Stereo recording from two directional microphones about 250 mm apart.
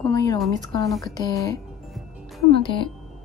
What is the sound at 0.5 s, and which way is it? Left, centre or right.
Speech, centre.